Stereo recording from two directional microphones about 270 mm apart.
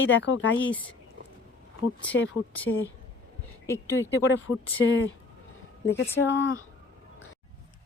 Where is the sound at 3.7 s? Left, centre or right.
Centre.